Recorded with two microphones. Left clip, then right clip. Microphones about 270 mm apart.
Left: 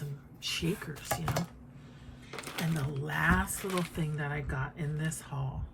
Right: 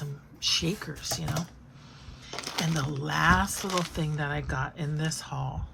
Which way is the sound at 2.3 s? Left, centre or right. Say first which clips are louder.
Right 6 dB; right.